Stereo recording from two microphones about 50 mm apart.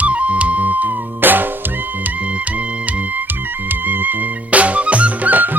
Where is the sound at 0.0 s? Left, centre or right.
Right.